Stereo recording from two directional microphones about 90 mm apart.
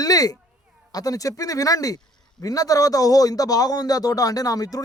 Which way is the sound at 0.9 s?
40° left (ahead or behind).